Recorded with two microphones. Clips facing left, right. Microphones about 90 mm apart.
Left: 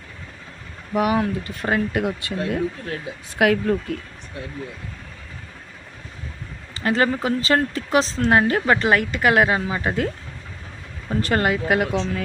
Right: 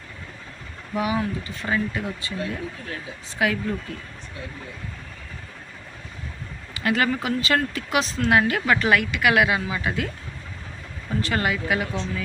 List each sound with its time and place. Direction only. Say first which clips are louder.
0.9 s speech: left 4 dB; 55° left (ahead or behind)
6.7 s a woman's voice: left 2 dB; 35° left (ahead or behind)
11.2 s speech: left 4 dB; 45° left (ahead or behind); by 12.2 s 65° left (ahead or behind)